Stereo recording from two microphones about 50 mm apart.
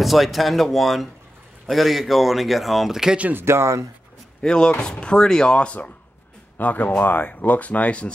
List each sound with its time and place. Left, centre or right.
0.0 s speech: centre
3.4 s speech: right
4.4 s speech: centre
6.6 s speech: left